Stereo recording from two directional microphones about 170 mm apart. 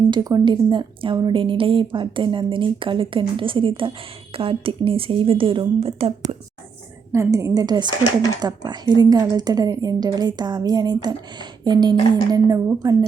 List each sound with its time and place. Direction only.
0.1 s speech: 25° right (ahead or behind)
7.1 s speech: 15° right (ahead or behind)